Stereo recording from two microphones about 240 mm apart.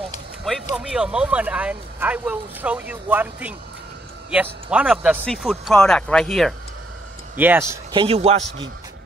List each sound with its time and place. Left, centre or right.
0.5 s speech: centre
7.3 s a man's voice: centre; by 8.6 s right